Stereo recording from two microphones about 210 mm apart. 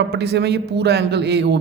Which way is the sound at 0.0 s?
55° right (ahead or behind).